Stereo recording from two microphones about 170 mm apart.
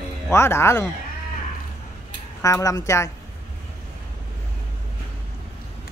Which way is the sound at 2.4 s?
20° left (ahead or behind).